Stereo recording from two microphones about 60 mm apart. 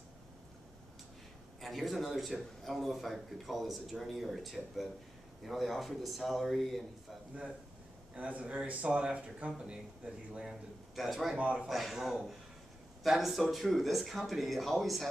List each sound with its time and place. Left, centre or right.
1.6 s a man's voice: centre
8.1 s a man's voice: right; by 15.0 s centre